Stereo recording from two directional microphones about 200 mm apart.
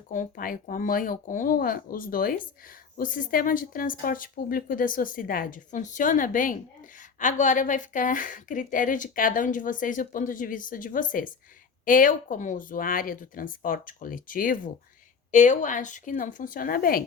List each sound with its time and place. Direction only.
0.1 s a woman's voice: 40° left (ahead or behind)